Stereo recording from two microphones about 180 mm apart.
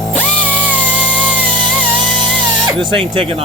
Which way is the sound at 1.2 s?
10° right (ahead or behind).